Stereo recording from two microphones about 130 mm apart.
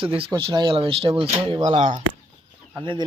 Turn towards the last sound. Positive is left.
turn(degrees=-40)  # may be behind; listen again after turning